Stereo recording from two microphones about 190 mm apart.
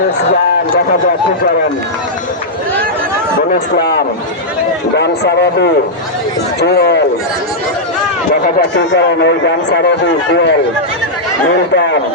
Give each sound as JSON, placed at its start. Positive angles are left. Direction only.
{"t": 4.9, "sound": "a man's voice", "side_deg": 60}
{"t": 9.2, "sound": "a man's voice", "side_deg": 65}
{"t": 11.7, "sound": "a man's voice", "side_deg": 65}